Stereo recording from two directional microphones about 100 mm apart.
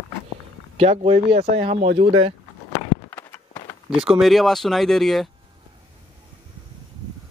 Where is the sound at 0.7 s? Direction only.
90° right; by 2.3 s 70° right (ahead or behind).